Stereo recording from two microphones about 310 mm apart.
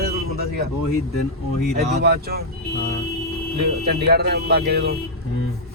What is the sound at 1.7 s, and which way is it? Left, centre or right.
Speech, right.